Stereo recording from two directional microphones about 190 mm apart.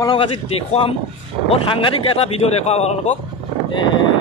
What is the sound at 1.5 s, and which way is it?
Speech, 30° left (ahead or behind).